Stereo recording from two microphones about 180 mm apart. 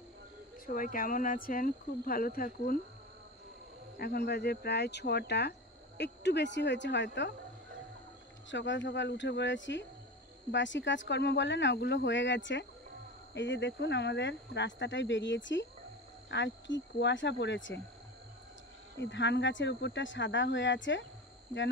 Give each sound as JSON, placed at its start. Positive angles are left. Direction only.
{"t": 0.7, "sound": "speech", "side_deg": 50}
{"t": 4.0, "sound": "speech", "side_deg": 60}
{"t": 8.5, "sound": "speech", "side_deg": 85}
{"t": 18.9, "sound": "speech", "side_deg": 85}